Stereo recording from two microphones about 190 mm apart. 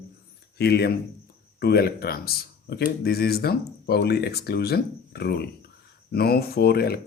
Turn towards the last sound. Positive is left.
turn(degrees=55)  # may be behind; listen again after turning